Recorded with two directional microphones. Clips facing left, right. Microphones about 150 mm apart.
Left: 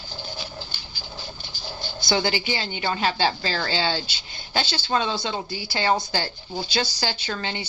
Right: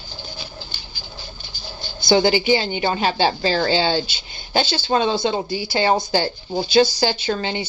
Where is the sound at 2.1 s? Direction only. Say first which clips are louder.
Right 9 dB; 20° right (ahead or behind).